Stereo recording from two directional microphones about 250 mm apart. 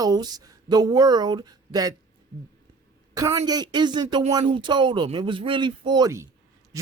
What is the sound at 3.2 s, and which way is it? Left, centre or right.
Speech, centre.